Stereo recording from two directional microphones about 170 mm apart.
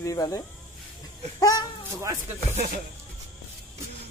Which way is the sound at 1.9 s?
15° right (ahead or behind).